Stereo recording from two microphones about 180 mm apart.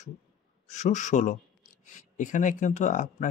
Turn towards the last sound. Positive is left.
turn(degrees=40)  # may be behind; listen again after turning